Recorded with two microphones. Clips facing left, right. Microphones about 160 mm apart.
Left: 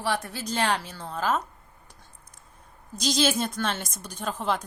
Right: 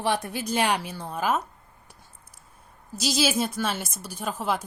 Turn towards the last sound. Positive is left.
turn(degrees=-5)  # may be behind; listen again after turning